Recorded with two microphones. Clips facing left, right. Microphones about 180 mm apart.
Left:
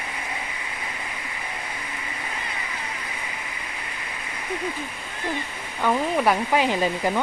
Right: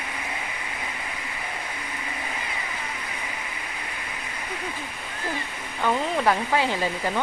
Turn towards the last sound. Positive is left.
turn(degrees=15)  # may be behind; listen again after turning